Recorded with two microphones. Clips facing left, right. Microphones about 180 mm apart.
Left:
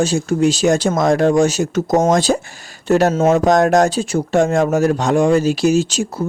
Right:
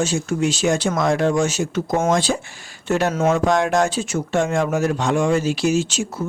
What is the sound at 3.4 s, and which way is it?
Speech, 40° left (ahead or behind).